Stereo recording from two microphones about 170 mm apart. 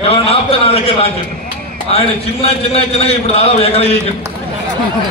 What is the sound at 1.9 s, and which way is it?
A man's voice, 35° left (ahead or behind).